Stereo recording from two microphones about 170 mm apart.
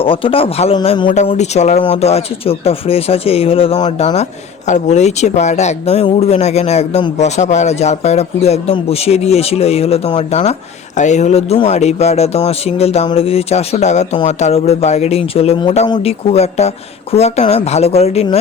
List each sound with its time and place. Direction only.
0.0 s speech: 30° left (ahead or behind)
1.1 s speech: 40° left (ahead or behind)